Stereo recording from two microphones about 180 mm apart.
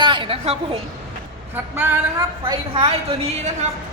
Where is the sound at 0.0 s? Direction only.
25° right (ahead or behind).